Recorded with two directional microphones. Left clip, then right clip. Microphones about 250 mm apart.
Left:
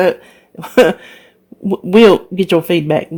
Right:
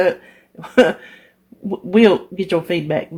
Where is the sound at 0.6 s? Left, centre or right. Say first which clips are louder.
Left 4 dB; left.